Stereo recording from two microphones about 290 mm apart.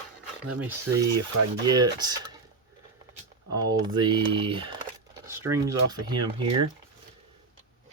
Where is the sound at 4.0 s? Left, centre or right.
Centre.